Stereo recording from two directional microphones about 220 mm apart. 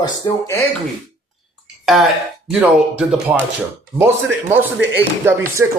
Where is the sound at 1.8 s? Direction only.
Centre (ahead or behind).